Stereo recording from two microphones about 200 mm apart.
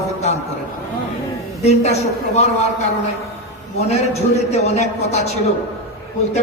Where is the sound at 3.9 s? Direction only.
35° left (ahead or behind).